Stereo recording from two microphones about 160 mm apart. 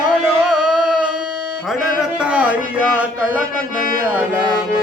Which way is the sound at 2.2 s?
10° right (ahead or behind).